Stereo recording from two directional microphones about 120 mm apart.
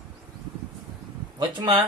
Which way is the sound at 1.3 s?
40° right (ahead or behind).